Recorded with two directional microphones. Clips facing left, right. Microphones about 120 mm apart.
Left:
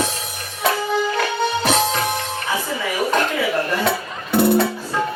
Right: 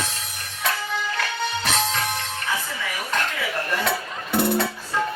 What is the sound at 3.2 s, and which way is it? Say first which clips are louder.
Dishes: left 7 dB; 30° left (ahead or behind).